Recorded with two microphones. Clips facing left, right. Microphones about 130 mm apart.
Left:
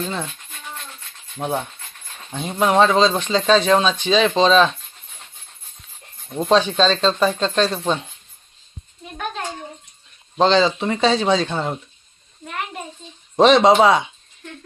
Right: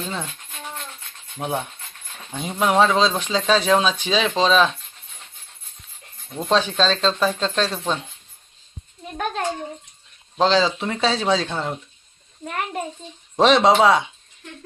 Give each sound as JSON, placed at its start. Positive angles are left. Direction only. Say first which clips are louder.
{"t": 0.0, "sound": "speech", "louder": "left 3 dB", "side_deg": 0}
{"t": 1.4, "sound": "speech", "louder": "left 2 dB", "side_deg": -5}
{"t": 6.4, "sound": "speech", "louder": "left 3 dB", "side_deg": 0}
{"t": 10.3, "sound": "speech", "louder": "left 2 dB", "side_deg": -5}
{"t": 12.5, "sound": "a child's voice", "louder": "right 3 dB", "side_deg": -40}
{"t": 13.4, "sound": "speech", "louder": "left 2 dB", "side_deg": 0}